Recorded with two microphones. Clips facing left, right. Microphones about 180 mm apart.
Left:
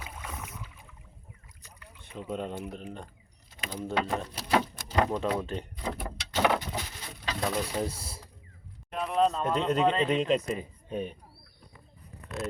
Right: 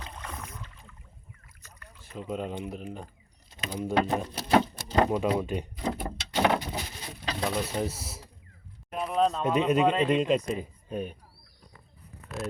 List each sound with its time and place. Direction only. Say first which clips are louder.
0.0 s boat: even; 5° left (ahead or behind)
2.3 s speech: right 1 dB; 5° right (ahead or behind)
3.6 s speech: right 4 dB; 20° right (ahead or behind)
4.7 s a sound: right 3 dB; 30° right (ahead or behind)
5.0 s speech: right 3 dB; 10° right (ahead or behind)
6.3 s a sound: right 1 dB; 15° right (ahead or behind)
7.3 s a man's voice: right 1 dB; 5° right (ahead or behind)
8.9 s a sound: even; 5° right (ahead or behind)
9.4 s a man's voice: right 2 dB; 10° right (ahead or behind)